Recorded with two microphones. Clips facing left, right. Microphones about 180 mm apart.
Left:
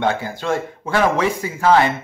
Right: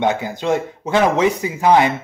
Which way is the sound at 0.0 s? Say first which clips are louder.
Right 2 dB; 20° right (ahead or behind).